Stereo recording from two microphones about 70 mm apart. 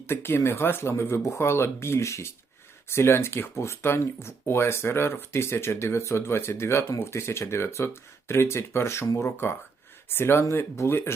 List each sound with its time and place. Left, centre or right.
0.1 s speech: left